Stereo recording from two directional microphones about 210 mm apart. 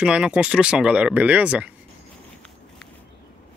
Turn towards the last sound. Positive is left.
turn(degrees=-5)  # may be behind; listen again after turning